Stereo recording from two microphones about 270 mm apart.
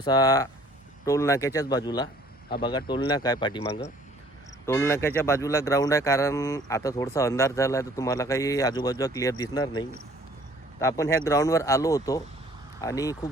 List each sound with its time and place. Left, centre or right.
0.0 s speech: centre
4.6 s speech: centre